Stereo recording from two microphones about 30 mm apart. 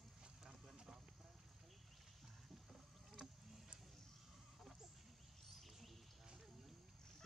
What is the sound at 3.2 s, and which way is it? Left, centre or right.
Boat, centre.